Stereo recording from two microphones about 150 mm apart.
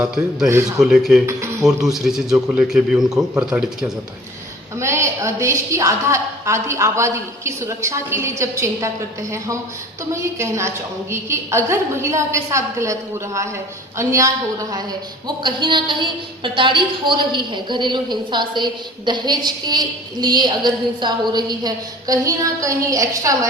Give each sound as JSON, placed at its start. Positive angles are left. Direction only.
{"t": 0.4, "sound": "a woman's voice", "side_deg": -20}
{"t": 0.8, "sound": "a man's voice", "side_deg": 0}
{"t": 1.3, "sound": "a sound", "side_deg": -20}
{"t": 1.6, "sound": "a man's voice", "side_deg": 0}
{"t": 4.8, "sound": "a woman's voice", "side_deg": -20}
{"t": 10.1, "sound": "a woman's voice", "side_deg": -20}